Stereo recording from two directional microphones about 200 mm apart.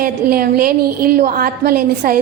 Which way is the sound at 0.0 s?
50° right (ahead or behind).